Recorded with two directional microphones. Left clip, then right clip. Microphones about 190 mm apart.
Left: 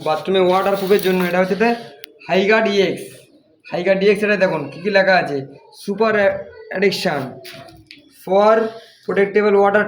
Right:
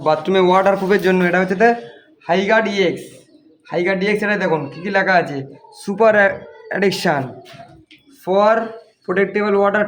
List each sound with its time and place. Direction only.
0.0 s speech: 65° right (ahead or behind)
2.2 s a man's voice: 30° right (ahead or behind)
5.8 s speech: 50° right (ahead or behind)
8.2 s speech: 35° right (ahead or behind)